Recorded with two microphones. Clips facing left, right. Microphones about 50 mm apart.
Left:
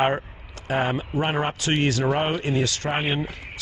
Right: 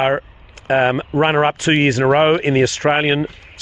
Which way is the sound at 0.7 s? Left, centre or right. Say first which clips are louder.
Right 9 dB; right.